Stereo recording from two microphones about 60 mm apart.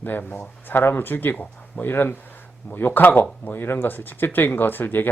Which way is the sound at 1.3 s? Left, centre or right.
Left.